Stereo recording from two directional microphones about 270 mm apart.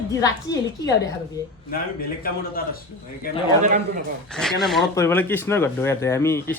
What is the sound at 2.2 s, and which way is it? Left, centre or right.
Speech, left.